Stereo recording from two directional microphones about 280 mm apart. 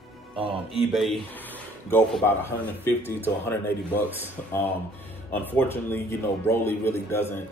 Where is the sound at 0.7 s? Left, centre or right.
Centre.